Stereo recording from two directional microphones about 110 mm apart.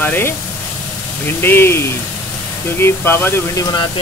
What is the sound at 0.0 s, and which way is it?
Speech, 20° left (ahead or behind).